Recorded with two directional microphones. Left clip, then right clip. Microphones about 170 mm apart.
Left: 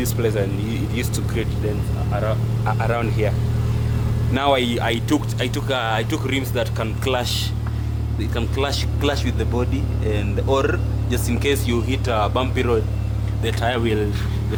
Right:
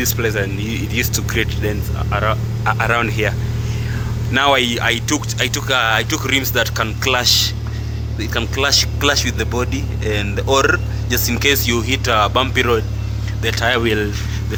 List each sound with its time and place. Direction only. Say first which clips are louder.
0.0 s speech: right 3 dB; 5° left (ahead or behind)
4.7 s speech: right 3 dB; 15° left (ahead or behind)
13.7 s speech: right 5 dB; 10° right (ahead or behind)